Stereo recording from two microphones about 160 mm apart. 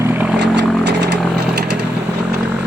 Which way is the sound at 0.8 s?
90° right.